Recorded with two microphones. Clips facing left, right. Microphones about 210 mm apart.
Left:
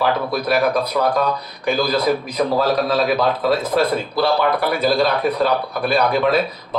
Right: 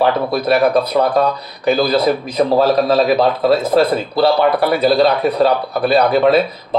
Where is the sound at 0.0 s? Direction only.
30° right (ahead or behind).